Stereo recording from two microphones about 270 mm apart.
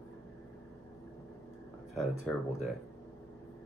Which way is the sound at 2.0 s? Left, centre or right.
Centre.